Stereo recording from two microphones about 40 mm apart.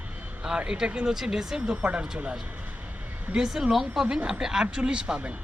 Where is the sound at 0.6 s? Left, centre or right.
Right.